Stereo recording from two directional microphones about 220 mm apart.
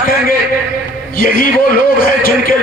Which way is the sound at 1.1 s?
40° left (ahead or behind).